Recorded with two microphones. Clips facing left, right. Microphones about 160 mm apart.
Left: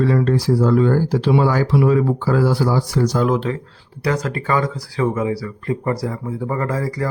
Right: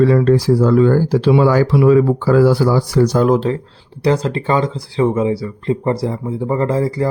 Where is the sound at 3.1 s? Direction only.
40° right (ahead or behind).